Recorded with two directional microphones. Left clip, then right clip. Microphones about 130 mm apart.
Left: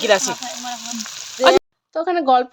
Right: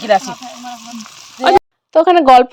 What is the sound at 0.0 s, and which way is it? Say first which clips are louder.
Speech: right 3 dB; 90° left.